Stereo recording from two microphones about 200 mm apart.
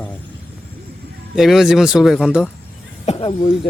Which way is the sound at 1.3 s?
Centre (ahead or behind).